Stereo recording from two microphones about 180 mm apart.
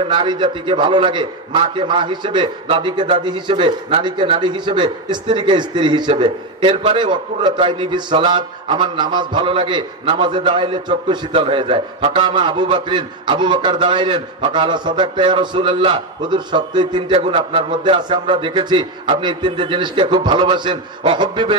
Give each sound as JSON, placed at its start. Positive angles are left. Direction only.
{"t": 0.1, "sound": "a man's voice", "side_deg": -25}